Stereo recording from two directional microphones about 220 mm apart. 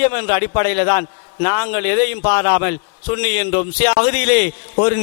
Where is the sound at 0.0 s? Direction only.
15° left (ahead or behind).